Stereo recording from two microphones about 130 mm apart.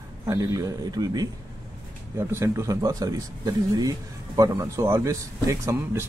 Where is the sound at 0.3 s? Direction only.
25° right (ahead or behind).